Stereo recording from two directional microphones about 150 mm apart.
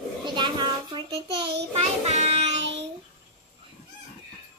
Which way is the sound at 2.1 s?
45° right (ahead or behind).